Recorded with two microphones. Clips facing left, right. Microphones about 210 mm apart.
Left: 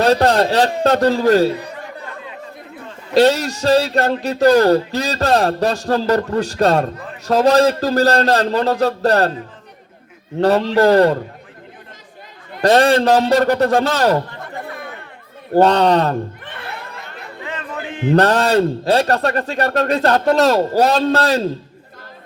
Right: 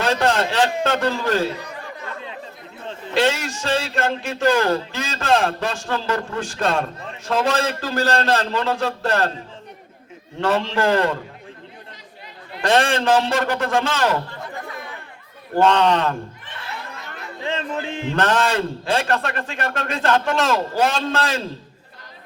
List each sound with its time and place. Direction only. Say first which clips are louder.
0.0 s a man's voice: left 6 dB; 40° left (ahead or behind)
3.2 s speech: left 7 dB; 40° left (ahead or behind)
10.4 s speech: left 7 dB; 40° left (ahead or behind)
12.6 s speech: left 6 dB; 40° left (ahead or behind)
15.5 s speech: left 4 dB; 40° left (ahead or behind)
16.4 s speech: left 4 dB; 60° left (ahead or behind)
17.4 s a sound: right 3 dB; 25° right (ahead or behind)
18.1 s speech: left 7 dB; 40° left (ahead or behind)